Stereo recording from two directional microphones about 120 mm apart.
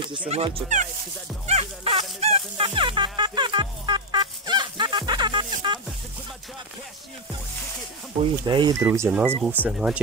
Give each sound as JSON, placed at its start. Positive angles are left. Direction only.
{"t": 0.3, "sound": "speech", "side_deg": -50}
{"t": 1.5, "sound": "music", "side_deg": -60}
{"t": 8.2, "sound": "speech", "side_deg": -40}
{"t": 8.8, "sound": "speech", "side_deg": -25}
{"t": 9.4, "sound": "speech", "side_deg": -10}